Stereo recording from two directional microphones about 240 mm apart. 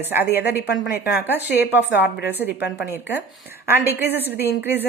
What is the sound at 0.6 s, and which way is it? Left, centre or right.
Speech, left.